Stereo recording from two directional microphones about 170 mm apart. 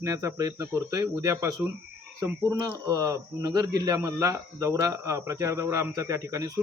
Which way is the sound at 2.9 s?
20° right (ahead or behind).